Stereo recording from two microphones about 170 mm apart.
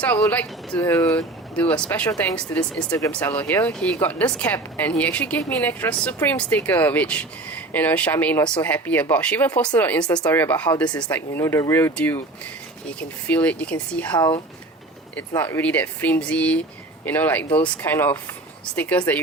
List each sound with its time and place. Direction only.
0.0 s speech: 10° left (ahead or behind)
14.2 s speech: 25° left (ahead or behind)
15.4 s speech: 10° left (ahead or behind)